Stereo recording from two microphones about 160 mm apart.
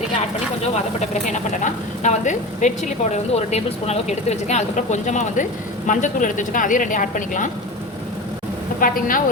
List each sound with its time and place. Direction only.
0.9 s a woman's voice: 50° left (ahead or behind)
8.8 s a woman's voice: 60° left (ahead or behind)